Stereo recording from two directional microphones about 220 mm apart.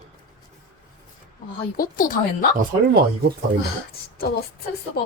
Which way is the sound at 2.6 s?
45° right (ahead or behind).